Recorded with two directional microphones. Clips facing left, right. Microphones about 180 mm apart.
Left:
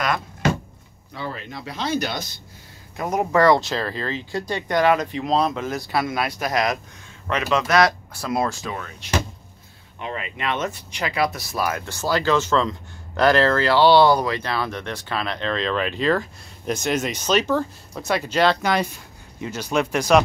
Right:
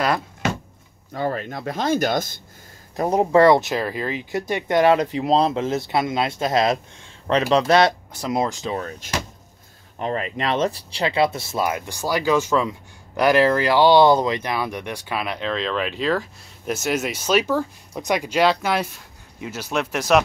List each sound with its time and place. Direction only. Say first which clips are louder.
1.1 s speech: right 7 dB; 50° right (ahead or behind)
3.0 s speech: right 4 dB; 30° right (ahead or behind)
8.7 s speech: even; 40° right (ahead or behind); by 20.2 s centre (ahead or behind)